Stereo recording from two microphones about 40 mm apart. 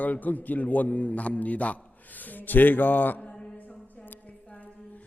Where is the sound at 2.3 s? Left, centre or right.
Left.